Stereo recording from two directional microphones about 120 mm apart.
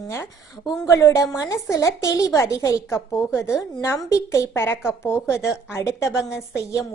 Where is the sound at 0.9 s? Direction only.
25° left (ahead or behind).